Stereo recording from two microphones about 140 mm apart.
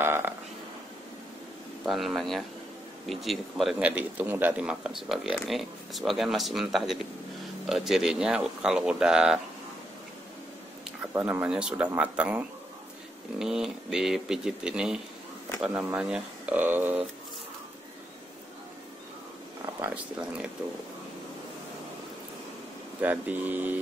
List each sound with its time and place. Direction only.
0.0 s burping: 15° right (ahead or behind)
1.9 s a man's voice: centre (ahead or behind)
11.0 s a man's voice: 10° right (ahead or behind)
19.6 s speech: 10° right (ahead or behind)
22.9 s speech: 10° right (ahead or behind)